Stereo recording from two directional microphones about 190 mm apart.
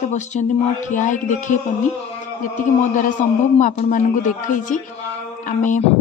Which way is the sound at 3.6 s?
40° left (ahead or behind).